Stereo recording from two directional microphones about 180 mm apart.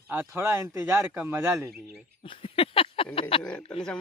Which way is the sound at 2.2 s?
30° left (ahead or behind).